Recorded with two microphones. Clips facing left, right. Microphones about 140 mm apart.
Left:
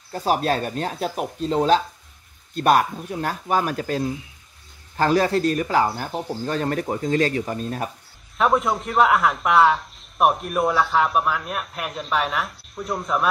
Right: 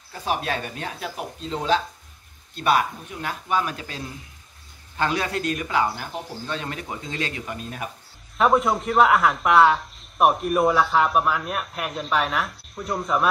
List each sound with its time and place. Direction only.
0.1 s speech: 40° left (ahead or behind)
8.4 s a man's voice: centre (ahead or behind)